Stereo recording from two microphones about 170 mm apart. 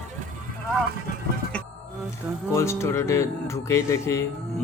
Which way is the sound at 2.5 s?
15° left (ahead or behind).